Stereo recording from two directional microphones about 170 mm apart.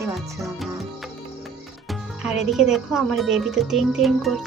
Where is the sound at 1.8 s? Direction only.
5° right (ahead or behind).